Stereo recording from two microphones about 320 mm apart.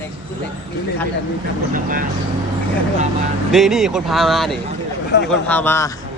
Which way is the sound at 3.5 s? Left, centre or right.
Centre.